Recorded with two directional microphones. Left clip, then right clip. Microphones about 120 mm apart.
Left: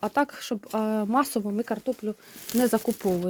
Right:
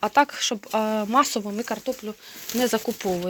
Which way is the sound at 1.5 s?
60° left (ahead or behind).